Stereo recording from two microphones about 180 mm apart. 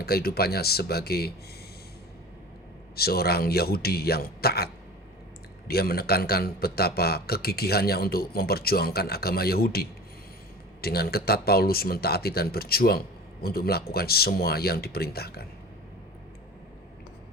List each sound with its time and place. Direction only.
0.0 s a man's voice: 60° left (ahead or behind)
2.9 s a man's voice: 60° left (ahead or behind)